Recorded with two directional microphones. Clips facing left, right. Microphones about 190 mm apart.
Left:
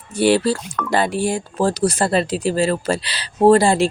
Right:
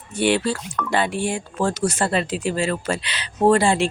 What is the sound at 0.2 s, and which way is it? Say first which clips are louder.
Speech: left 4 dB; 35° left (ahead or behind).